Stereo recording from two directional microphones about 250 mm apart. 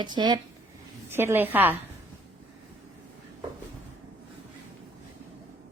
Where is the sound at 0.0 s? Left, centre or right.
Centre.